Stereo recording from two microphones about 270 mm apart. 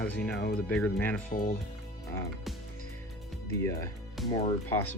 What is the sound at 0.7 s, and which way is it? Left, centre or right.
Speech, centre.